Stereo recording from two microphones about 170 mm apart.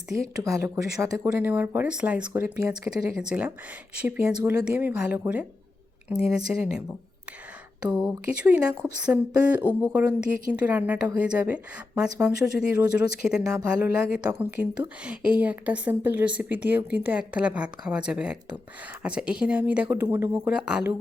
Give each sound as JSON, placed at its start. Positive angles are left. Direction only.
{"t": 0.4, "sound": "speech", "side_deg": -20}
{"t": 7.9, "sound": "speech", "side_deg": -5}
{"t": 12.3, "sound": "speech", "side_deg": 75}
{"t": 13.2, "sound": "speech", "side_deg": -5}